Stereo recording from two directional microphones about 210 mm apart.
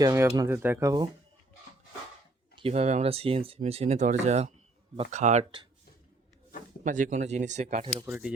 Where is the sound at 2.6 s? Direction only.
30° right (ahead or behind).